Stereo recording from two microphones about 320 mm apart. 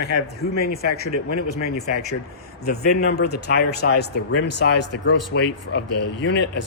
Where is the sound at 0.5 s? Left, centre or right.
Left.